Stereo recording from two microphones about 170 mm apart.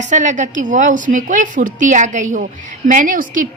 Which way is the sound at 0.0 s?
45° right (ahead or behind).